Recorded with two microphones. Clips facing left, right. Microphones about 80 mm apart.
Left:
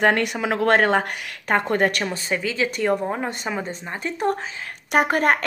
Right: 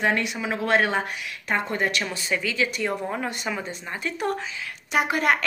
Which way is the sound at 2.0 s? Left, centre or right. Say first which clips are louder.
Left 2 dB; left.